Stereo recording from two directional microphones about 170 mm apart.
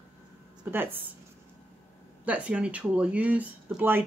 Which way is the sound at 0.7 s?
10° right (ahead or behind).